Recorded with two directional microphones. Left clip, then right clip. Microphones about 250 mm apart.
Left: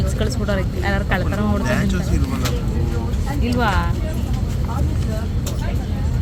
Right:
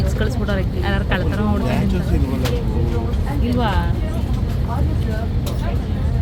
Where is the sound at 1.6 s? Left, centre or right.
Centre.